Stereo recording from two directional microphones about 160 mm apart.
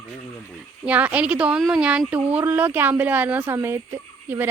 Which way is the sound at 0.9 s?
10° right (ahead or behind).